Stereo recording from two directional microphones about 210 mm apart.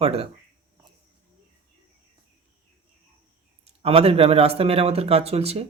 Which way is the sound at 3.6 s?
30° right (ahead or behind).